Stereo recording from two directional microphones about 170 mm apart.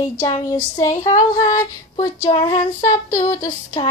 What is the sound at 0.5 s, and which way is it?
Female singing, 20° left (ahead or behind).